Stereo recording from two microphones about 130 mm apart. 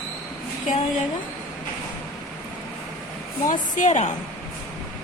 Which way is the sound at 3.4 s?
75° left (ahead or behind).